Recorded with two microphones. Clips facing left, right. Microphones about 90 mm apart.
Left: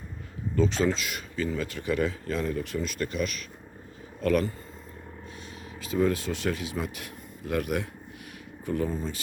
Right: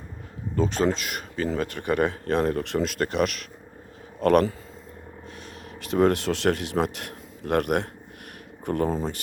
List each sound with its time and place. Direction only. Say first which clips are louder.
0.5 s a man's voice: right 2 dB; 45° right (ahead or behind); by 4.4 s 60° right (ahead or behind)
5.8 s a man's voice: right 5 dB; 65° right (ahead or behind)